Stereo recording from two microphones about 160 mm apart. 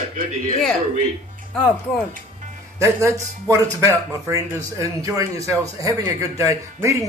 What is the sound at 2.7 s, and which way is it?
Speech, 20° right (ahead or behind).